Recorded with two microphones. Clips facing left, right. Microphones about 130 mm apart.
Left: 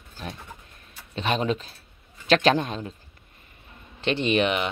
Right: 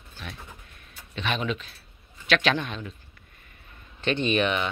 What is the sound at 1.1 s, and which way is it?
A man's voice, 35° left (ahead or behind).